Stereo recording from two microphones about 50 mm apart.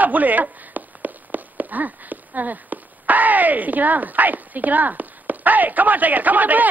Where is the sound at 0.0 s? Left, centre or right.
Right.